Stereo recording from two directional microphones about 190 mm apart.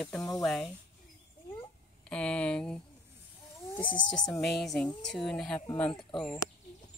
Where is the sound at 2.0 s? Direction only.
5° left (ahead or behind).